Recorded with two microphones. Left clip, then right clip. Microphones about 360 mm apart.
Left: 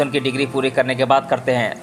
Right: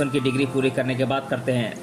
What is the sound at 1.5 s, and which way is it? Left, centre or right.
Speech, centre.